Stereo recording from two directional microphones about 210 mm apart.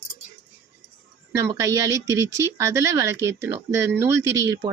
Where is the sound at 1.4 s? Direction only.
15° right (ahead or behind).